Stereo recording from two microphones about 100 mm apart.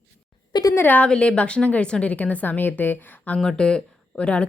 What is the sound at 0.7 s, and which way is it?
A woman's voice, 20° left (ahead or behind).